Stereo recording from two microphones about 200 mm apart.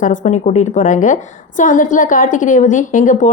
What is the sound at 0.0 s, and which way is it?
A woman's voice, 40° left (ahead or behind).